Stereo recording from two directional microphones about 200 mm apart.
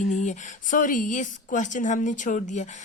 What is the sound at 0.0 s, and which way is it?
A woman's voice, 35° left (ahead or behind).